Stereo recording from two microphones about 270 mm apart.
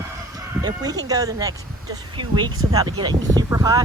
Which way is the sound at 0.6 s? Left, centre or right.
Centre.